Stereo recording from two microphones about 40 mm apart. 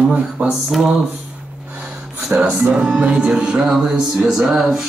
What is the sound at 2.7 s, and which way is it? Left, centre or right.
Speech, centre.